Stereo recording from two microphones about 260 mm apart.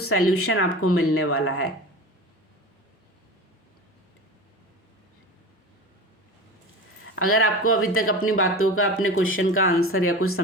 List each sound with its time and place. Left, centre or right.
0.0 s speech: left
7.2 s speech: left